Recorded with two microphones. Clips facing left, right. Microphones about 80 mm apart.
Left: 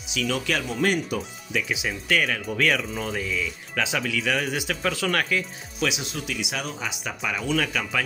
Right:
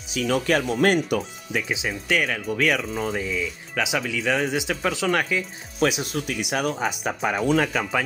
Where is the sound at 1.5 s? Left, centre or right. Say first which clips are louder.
Even; right.